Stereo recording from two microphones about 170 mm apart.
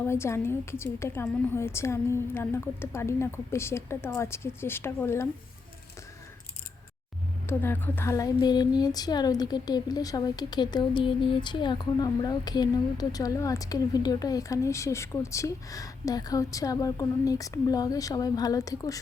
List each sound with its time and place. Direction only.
0.0 s a woman's voice: 15° left (ahead or behind)
7.4 s speech: 15° left (ahead or behind)